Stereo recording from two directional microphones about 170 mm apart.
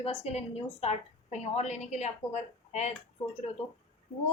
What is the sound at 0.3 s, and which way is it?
A woman's voice, 35° left (ahead or behind).